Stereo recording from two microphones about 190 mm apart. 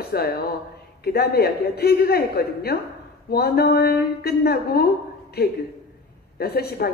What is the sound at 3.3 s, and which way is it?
A woman's voice, 55° left (ahead or behind).